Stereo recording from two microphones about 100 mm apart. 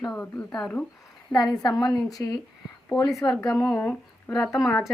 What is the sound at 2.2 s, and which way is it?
Speech, 30° left (ahead or behind).